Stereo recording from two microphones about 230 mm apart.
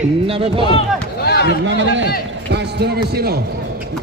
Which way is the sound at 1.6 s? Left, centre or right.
Right.